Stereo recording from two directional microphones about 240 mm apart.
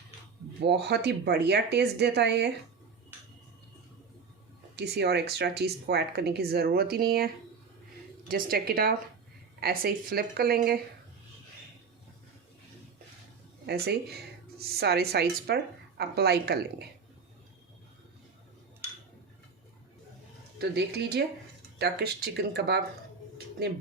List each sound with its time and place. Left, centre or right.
0.6 s speech: right
4.8 s speech: right
8.3 s speech: right
14.8 s speech: right
20.6 s speech: right